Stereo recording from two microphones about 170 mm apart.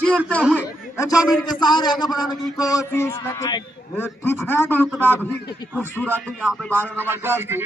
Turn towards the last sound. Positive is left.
turn(degrees=-15)  # may be behind; listen again after turning